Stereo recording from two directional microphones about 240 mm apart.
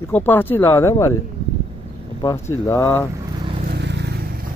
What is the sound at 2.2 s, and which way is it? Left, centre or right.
Speech, centre.